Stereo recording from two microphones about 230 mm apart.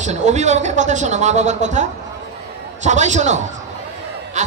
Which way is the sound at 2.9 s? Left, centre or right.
Right.